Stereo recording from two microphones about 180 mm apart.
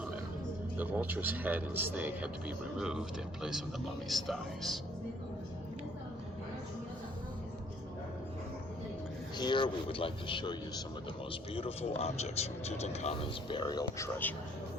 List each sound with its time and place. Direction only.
0.8 s speech: 10° right (ahead or behind)
4.1 s speech: centre (ahead or behind)
9.4 s speech: 25° left (ahead or behind)